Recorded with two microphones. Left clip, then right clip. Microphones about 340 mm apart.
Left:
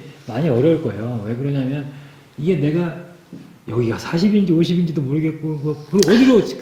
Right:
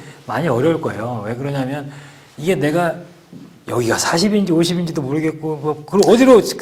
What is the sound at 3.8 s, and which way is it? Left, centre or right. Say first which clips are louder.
Speech: right 5 dB; right.